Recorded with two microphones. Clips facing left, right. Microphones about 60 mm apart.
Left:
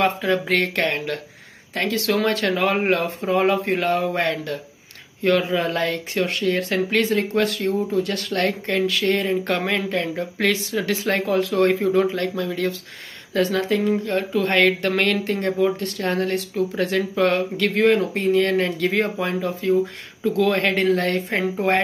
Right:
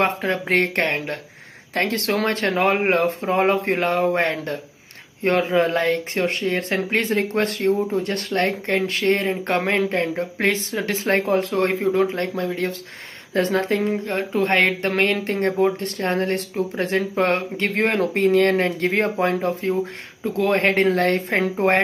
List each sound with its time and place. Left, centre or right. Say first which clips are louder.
0.0 s speech: left 1 dB; right
1.8 s speech: even; right